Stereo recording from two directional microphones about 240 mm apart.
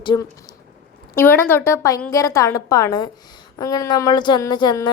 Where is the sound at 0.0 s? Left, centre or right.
Centre.